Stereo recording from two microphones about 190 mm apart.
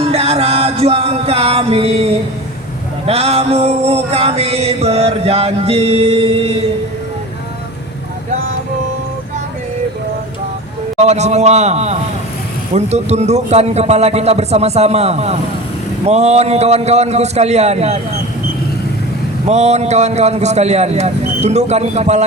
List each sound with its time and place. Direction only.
0.0 s music: 30° right (ahead or behind)
10.9 s music: 35° right (ahead or behind)
19.5 s music: 35° right (ahead or behind)